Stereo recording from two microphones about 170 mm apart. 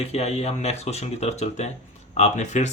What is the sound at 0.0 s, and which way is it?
Speech, 40° left (ahead or behind).